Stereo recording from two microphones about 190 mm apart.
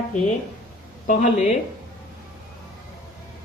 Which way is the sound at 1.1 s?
40° left (ahead or behind).